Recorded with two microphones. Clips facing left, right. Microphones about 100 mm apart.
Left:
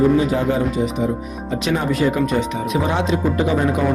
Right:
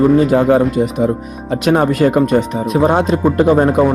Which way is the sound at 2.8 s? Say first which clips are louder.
Right 8 dB; 45° right (ahead or behind).